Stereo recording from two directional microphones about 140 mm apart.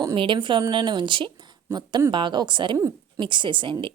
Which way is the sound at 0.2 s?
35° right (ahead or behind).